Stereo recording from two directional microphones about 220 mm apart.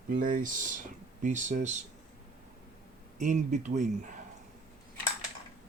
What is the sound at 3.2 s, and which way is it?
Speech, 35° right (ahead or behind).